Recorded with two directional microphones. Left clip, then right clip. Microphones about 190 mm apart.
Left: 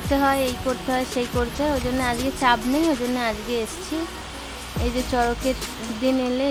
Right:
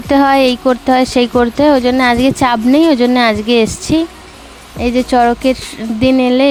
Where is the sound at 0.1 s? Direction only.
45° right (ahead or behind).